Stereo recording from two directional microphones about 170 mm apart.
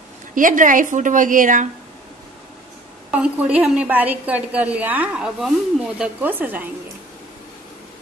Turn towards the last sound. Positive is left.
turn(degrees=-10)  # may be behind; listen again after turning